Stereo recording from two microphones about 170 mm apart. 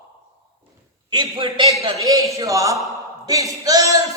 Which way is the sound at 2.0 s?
20° right (ahead or behind).